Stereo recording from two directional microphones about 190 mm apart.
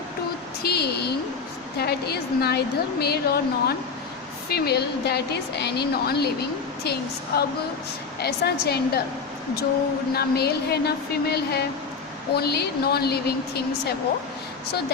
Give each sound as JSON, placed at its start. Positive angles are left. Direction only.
{"t": 0.6, "sound": "a woman's voice", "side_deg": 60}
{"t": 10.2, "sound": "speech", "side_deg": 55}